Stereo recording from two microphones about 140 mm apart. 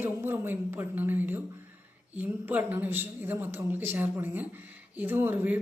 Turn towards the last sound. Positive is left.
turn(degrees=-15)  # may be behind; listen again after turning